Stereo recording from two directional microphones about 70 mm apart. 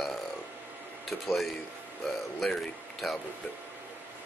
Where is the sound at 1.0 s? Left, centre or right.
Centre.